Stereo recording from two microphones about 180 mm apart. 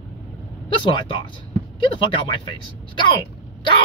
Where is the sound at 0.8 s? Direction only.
30° left (ahead or behind).